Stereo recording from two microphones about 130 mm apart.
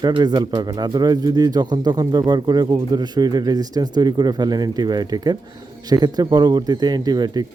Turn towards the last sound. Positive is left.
turn(degrees=-30)  # may be behind; listen again after turning